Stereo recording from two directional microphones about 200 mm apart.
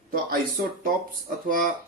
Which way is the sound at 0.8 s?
45° right (ahead or behind).